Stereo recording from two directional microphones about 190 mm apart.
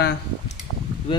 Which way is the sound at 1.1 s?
30° left (ahead or behind).